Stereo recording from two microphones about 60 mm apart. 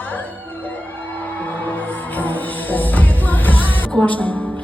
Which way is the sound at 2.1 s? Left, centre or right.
Left.